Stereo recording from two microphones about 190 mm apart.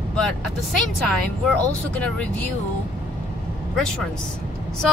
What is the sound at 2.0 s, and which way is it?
Speech, 5° left (ahead or behind).